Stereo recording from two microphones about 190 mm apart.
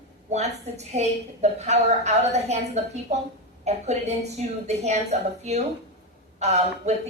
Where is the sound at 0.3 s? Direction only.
35° right (ahead or behind).